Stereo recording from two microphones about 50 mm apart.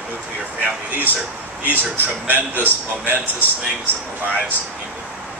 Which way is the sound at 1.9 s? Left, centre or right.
Right.